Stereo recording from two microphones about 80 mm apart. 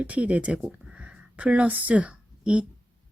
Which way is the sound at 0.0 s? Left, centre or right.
Centre.